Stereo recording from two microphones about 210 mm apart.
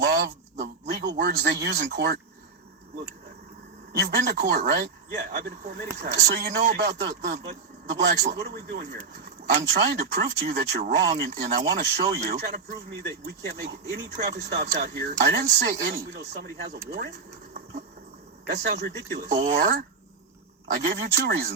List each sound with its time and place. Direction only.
0.0 s a sound: 50° right (ahead or behind)
3.9 s speech: 50° right (ahead or behind)
18.5 s speech: 50° right (ahead or behind)
20.9 s speech: 50° right (ahead or behind)